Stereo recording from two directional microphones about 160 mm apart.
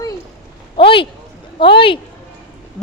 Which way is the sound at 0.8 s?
35° left (ahead or behind).